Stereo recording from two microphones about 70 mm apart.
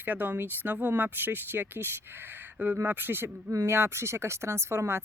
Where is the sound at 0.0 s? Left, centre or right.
Right.